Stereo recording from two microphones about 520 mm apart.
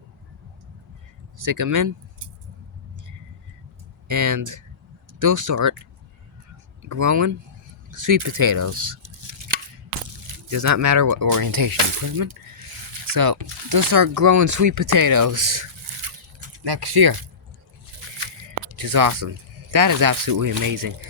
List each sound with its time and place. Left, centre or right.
1.4 s speech: right
4.1 s speech: right
9.0 s chopping: right
10.2 s speech: right
16.6 s speech: right
18.4 s squish: right
19.7 s speech: right